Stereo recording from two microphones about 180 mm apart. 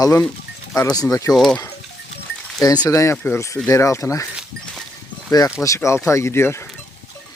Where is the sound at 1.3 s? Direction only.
Centre (ahead or behind).